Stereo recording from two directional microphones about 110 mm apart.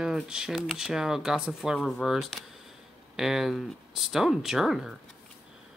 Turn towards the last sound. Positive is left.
turn(degrees=0)  # may be behind; listen again after turning